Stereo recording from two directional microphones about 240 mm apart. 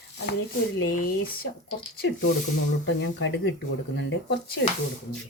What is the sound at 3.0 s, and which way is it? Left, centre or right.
Speech, left.